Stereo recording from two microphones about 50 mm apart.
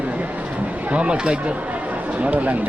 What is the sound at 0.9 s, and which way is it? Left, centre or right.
A man's voice, right.